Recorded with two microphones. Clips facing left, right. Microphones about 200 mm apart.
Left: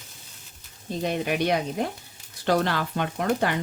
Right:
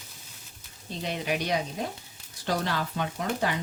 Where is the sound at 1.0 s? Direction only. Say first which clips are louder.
Left 5 dB; 50° left (ahead or behind).